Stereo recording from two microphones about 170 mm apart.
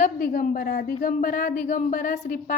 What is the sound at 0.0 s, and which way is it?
A woman's voice, 50° left (ahead or behind).